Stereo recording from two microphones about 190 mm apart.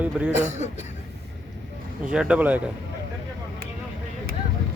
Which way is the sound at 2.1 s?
5° right (ahead or behind).